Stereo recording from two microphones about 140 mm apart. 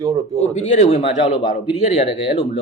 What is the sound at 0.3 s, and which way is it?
Speech, 55° left (ahead or behind).